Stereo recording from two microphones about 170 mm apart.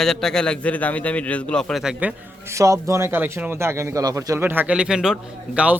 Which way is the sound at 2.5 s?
20° right (ahead or behind).